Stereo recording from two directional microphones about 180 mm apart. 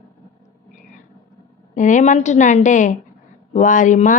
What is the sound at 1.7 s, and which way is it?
A woman's voice, 45° left (ahead or behind).